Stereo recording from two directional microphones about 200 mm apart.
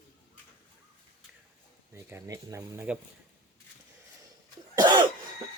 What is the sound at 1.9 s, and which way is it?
Speech, 10° right (ahead or behind).